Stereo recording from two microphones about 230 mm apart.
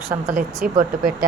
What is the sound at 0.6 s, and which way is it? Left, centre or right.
Speech, right.